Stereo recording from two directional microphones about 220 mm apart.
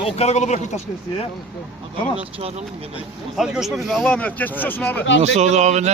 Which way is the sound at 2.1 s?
25° right (ahead or behind).